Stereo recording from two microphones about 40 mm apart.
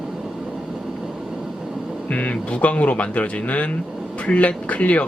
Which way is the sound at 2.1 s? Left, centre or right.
Left.